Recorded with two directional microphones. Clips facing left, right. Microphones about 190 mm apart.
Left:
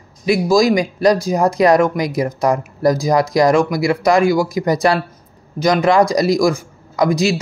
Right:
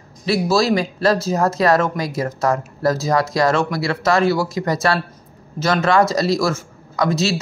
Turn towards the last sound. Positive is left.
turn(degrees=15)  # may be behind; listen again after turning